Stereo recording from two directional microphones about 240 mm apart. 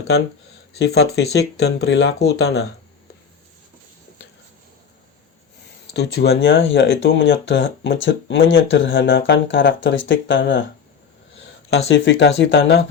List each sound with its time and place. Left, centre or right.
0.8 s speech: left
5.9 s speech: left
11.9 s speech: left